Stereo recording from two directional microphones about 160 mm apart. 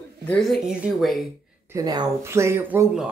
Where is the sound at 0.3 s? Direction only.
Centre (ahead or behind).